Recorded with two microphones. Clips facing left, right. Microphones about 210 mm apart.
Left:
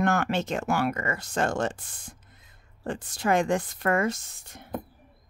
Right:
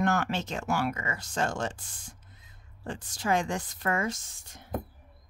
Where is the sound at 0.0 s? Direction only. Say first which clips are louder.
Left 3 dB; 55° left (ahead or behind).